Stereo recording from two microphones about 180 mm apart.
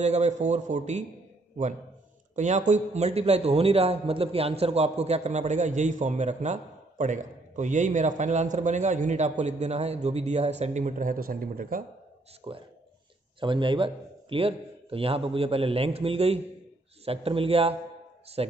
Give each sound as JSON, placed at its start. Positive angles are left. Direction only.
{"t": 0.0, "sound": "a man's voice", "side_deg": -40}
{"t": 2.3, "sound": "a man's voice", "side_deg": -40}
{"t": 12.5, "sound": "a man's voice", "side_deg": -30}